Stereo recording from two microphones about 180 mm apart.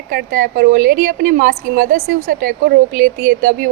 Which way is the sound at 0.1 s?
50° right (ahead or behind).